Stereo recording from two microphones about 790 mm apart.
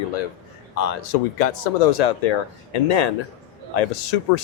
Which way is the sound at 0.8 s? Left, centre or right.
Left.